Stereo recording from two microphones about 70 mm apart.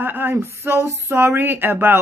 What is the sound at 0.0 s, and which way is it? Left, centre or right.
Speech, right.